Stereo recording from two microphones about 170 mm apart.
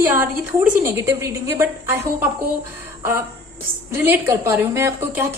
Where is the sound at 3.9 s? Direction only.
15° right (ahead or behind).